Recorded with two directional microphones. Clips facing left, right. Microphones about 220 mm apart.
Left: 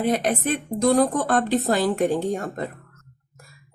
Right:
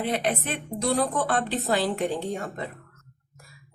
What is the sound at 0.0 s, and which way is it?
Speech, 45° left (ahead or behind).